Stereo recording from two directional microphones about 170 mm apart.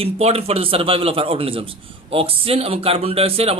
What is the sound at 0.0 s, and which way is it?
A man's voice, 35° right (ahead or behind).